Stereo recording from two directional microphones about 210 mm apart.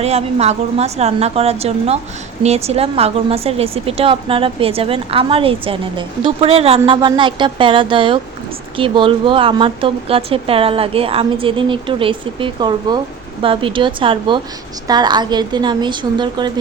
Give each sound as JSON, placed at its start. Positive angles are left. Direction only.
{"t": 0.0, "sound": "a woman's voice", "side_deg": -30}